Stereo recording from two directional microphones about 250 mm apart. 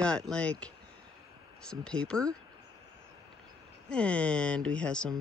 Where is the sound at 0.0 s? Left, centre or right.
Centre.